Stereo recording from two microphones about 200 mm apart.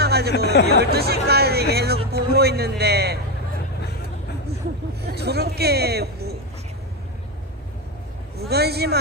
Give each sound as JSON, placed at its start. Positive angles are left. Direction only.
{"t": 0.0, "sound": "music", "side_deg": -55}
{"t": 0.3, "sound": "speech", "side_deg": 60}
{"t": 0.7, "sound": "a man's voice", "side_deg": -55}
{"t": 5.0, "sound": "speech", "side_deg": -55}
{"t": 8.4, "sound": "a man's voice", "side_deg": -55}